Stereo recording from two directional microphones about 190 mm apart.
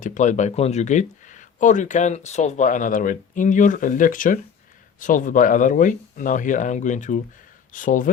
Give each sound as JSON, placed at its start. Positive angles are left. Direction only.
{"t": 0.0, "sound": "speech", "side_deg": 40}